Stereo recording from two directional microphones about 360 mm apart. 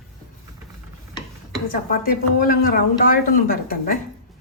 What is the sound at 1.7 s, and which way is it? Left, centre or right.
Speech, left.